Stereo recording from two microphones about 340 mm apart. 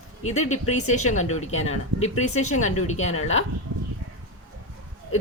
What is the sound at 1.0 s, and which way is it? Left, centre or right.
Speech, left.